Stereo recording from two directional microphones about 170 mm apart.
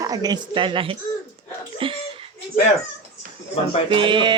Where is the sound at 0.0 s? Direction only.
20° right (ahead or behind).